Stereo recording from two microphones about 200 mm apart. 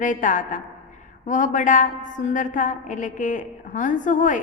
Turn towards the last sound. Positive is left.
turn(degrees=40)  # may be behind; listen again after turning